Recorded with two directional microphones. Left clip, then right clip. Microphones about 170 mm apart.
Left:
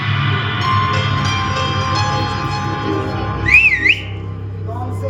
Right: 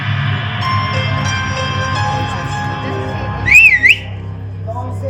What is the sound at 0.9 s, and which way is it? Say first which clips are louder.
Music: even; 10° left (ahead or behind).